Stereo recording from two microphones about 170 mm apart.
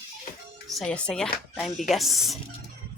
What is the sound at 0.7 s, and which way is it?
Speech, 5° left (ahead or behind).